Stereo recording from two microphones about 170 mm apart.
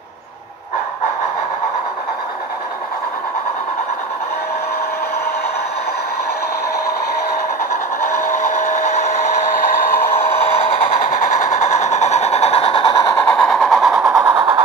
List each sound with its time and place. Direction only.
11.0 s vehicle: 50° left (ahead or behind); by 13.2 s 25° left (ahead or behind)
13.2 s vehicle: 5° left (ahead or behind)
14.2 s vehicle: 20° right (ahead or behind)